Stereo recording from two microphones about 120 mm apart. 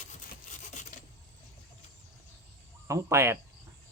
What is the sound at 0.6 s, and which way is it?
Filing, 90° left.